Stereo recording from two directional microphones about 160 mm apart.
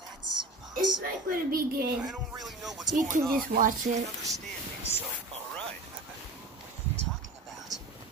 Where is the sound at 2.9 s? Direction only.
55° right (ahead or behind).